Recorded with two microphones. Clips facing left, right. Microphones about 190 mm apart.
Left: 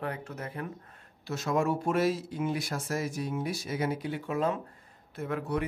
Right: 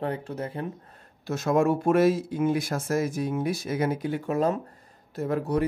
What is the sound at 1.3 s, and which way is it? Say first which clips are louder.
A man's voice: right 6 dB; 50° right (ahead or behind).